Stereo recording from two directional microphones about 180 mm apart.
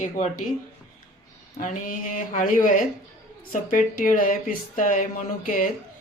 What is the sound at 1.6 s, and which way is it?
Speech, 45° left (ahead or behind).